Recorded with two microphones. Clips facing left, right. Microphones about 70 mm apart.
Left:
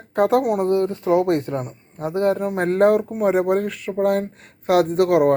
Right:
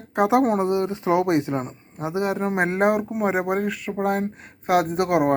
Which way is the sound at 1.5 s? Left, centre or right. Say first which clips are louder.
Even; right.